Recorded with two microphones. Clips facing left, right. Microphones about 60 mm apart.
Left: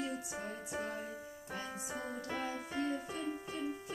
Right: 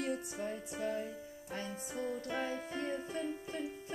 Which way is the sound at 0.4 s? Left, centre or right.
Left.